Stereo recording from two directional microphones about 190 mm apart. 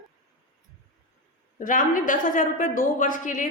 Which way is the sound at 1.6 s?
45° left (ahead or behind).